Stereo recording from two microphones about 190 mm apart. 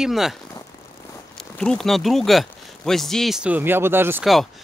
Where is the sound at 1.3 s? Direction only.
5° left (ahead or behind).